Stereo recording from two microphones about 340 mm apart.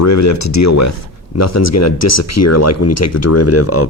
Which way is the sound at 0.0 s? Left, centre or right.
Left.